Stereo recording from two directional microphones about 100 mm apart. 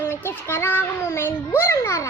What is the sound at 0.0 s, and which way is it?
Child singing, 20° left (ahead or behind).